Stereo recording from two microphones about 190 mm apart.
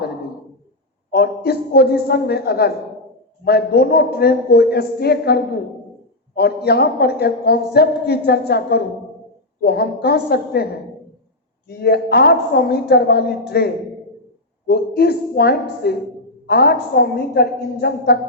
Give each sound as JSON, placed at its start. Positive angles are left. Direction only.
{"t": 1.1, "sound": "a woman's voice", "side_deg": 55}
{"t": 11.7, "sound": "a woman's voice", "side_deg": 60}
{"t": 14.7, "sound": "a woman's voice", "side_deg": 55}